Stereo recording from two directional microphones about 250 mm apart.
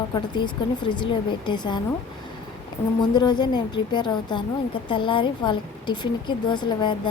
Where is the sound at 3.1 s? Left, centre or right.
Centre.